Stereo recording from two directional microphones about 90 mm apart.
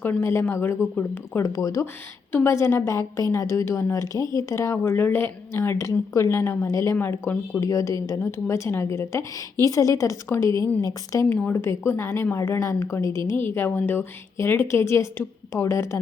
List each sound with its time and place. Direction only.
0.0 s a woman's voice: 25° left (ahead or behind)
1.4 s a woman's voice: 40° left (ahead or behind)
6.9 s a woman's voice: 20° left (ahead or behind)
7.6 s a woman's voice: 35° left (ahead or behind)
13.4 s a woman's voice: 25° left (ahead or behind)